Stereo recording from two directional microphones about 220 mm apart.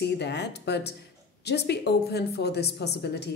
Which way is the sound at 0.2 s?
50° left (ahead or behind).